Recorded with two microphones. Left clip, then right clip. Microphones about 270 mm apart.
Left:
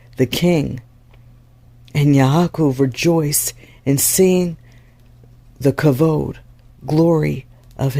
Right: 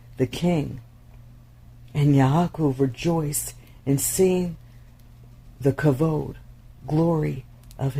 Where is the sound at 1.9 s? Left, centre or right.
Left.